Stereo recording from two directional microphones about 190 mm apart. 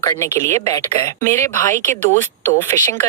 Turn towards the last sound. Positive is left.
turn(degrees=15)  # may be behind; listen again after turning